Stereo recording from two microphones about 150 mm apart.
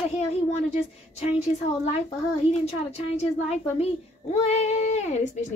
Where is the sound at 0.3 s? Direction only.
45° left (ahead or behind).